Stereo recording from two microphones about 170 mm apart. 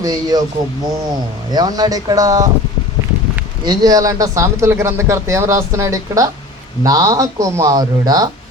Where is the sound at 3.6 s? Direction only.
25° right (ahead or behind).